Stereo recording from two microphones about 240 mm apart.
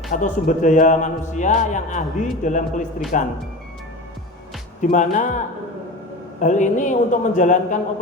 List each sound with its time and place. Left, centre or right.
0.1 s a man's voice: left
4.8 s a man's voice: left
6.4 s a man's voice: left